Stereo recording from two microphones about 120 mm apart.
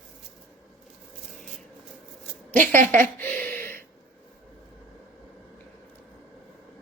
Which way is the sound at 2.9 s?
15° left (ahead or behind).